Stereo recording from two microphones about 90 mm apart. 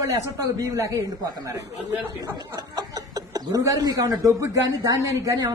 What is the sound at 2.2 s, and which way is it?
A woman's voice, 45° right (ahead or behind).